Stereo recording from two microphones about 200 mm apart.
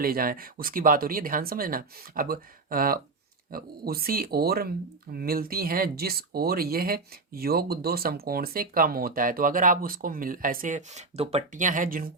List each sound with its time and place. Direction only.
0.0 s speech: 45° right (ahead or behind)